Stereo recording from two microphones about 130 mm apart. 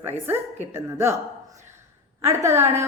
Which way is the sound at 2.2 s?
20° right (ahead or behind).